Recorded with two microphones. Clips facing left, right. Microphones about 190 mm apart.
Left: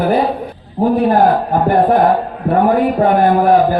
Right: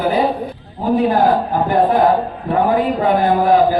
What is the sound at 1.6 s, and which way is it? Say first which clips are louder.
A man's voice: left 2 dB; 55° left (ahead or behind).